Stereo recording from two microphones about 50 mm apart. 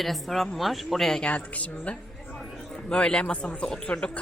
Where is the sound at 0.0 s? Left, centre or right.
Centre.